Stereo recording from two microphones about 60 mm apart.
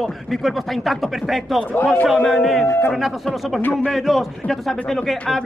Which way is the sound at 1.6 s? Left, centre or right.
Left.